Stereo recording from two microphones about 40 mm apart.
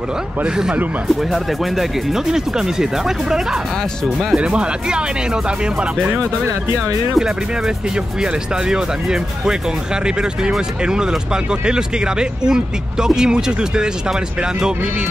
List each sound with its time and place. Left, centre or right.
1.0 s speech: centre
2.2 s speech: centre
4.4 s speech: right
7.2 s speech: centre
10.9 s speech: centre